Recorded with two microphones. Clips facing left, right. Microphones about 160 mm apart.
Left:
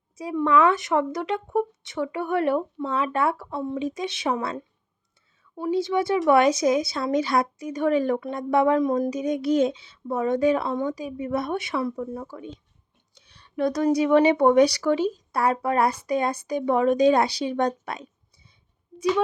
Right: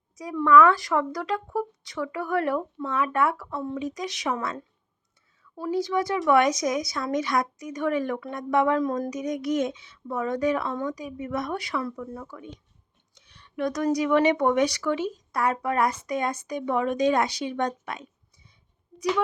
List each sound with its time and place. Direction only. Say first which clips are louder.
0.2 s speech: right 2 dB; 25° left (ahead or behind)
5.4 s speech: left 2 dB; 20° left (ahead or behind)